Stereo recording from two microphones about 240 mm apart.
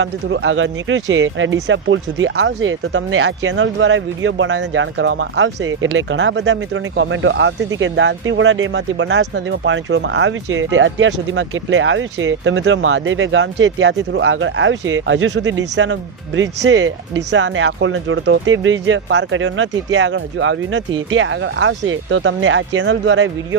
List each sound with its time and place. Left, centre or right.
0.0 s speech: right